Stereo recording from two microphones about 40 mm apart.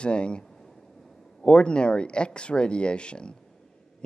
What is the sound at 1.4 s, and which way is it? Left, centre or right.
Speech, left.